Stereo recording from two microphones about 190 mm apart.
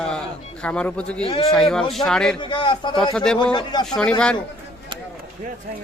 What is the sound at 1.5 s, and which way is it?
Speech, centre (ahead or behind).